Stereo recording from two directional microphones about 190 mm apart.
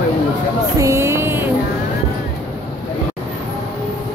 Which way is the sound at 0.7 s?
15° right (ahead or behind).